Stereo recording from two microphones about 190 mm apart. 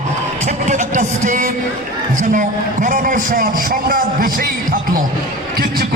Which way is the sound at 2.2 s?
45° right (ahead or behind).